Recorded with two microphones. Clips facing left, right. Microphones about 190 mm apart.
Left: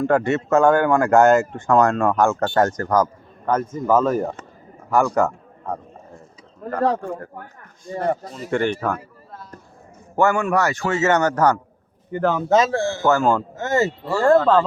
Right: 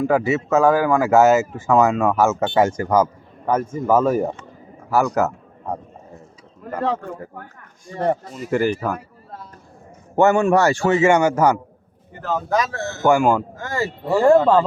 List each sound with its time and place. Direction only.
0.0 s speech: 5° right (ahead or behind)
4.9 s a sound: 5° right (ahead or behind)
8.4 s speech: 5° right (ahead or behind)
10.2 s speech: 25° right (ahead or behind)
10.9 s speech: 10° right (ahead or behind)
12.1 s speech: 60° left (ahead or behind)
12.5 s a man's voice: 25° left (ahead or behind)
13.1 s speech: 10° right (ahead or behind)
13.6 s a man's voice: 25° left (ahead or behind)
14.0 s speech: 15° right (ahead or behind)